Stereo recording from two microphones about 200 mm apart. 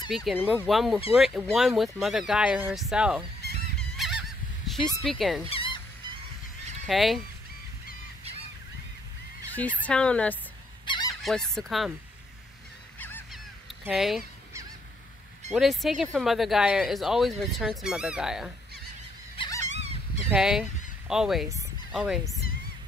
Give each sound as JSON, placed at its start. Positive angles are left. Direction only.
{"t": 0.1, "sound": "speech", "side_deg": 0}
{"t": 3.7, "sound": "goose", "side_deg": 0}
{"t": 4.6, "sound": "speech", "side_deg": 0}
{"t": 5.5, "sound": "fowl", "side_deg": 25}
{"t": 6.9, "sound": "speech", "side_deg": 0}
{"t": 9.8, "sound": "speech", "side_deg": 5}
{"t": 10.9, "sound": "goose", "side_deg": 20}
{"t": 11.2, "sound": "speech", "side_deg": 0}
{"t": 13.0, "sound": "goose", "side_deg": 10}
{"t": 13.8, "sound": "speech", "side_deg": 0}
{"t": 15.5, "sound": "speech", "side_deg": 0}
{"t": 19.3, "sound": "dog", "side_deg": 25}
{"t": 19.6, "sound": "dog", "side_deg": -35}
{"t": 20.2, "sound": "speech", "side_deg": -5}